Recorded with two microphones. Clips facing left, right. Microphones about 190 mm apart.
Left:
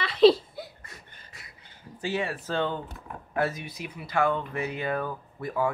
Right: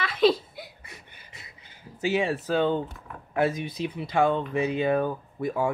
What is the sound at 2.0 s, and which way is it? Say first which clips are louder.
Speech: right 4 dB; 10° right (ahead or behind).